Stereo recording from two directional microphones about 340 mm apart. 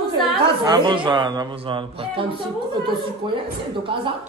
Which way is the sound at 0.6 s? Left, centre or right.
Centre.